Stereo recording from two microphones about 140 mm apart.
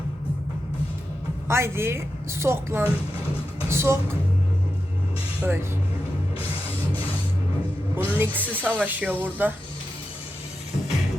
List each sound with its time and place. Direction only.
1.5 s a woman's voice: 20° right (ahead or behind)
5.4 s speech: 15° right (ahead or behind)
7.9 s speech: 15° right (ahead or behind)